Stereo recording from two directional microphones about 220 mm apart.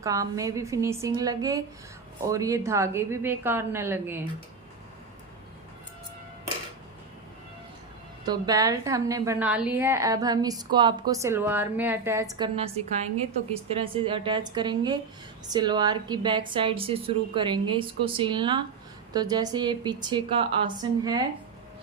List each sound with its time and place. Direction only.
0.0 s a woman's voice: 15° right (ahead or behind)
8.2 s a woman's voice: 20° right (ahead or behind)
12.5 s a woman's voice: 25° right (ahead or behind)